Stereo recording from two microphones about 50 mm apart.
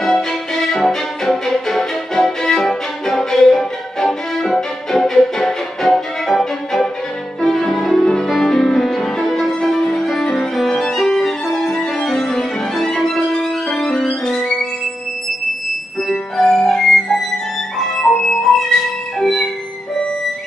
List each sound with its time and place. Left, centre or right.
0.0 s music: centre
16.1 s music: centre
18.0 s music: centre
19.1 s music: centre